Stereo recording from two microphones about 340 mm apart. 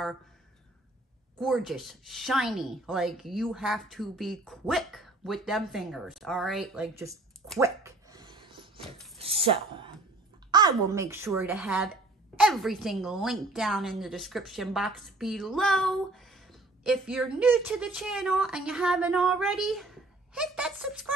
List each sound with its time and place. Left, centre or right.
1.4 s speech: centre